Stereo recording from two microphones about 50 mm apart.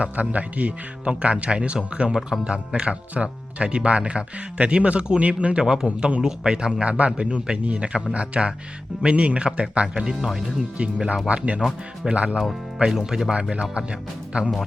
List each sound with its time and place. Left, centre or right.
0.0 s speech: right; by 10.6 s centre
10.8 s speech: right
12.8 s speech: centre
13.5 s speech: right